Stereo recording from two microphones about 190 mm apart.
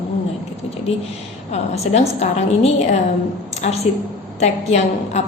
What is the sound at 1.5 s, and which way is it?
A woman's voice, 35° left (ahead or behind).